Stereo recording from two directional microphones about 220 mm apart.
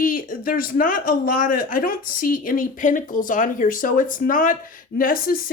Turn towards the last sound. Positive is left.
turn(degrees=40)  # may be behind; listen again after turning